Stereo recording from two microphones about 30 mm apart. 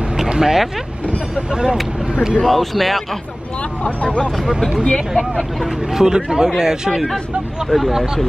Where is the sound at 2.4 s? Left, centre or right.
Centre.